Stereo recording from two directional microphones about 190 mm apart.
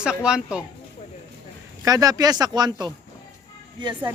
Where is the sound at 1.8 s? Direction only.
20° right (ahead or behind).